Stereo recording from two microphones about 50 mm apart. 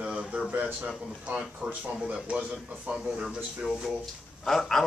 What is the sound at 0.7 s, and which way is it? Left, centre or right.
Speech, right.